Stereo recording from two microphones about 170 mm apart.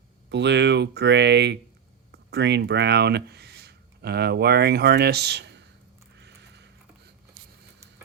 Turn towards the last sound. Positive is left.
turn(degrees=-90)